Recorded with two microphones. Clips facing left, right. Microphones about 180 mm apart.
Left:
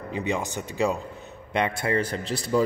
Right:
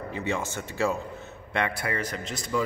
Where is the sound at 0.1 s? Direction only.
15° left (ahead or behind).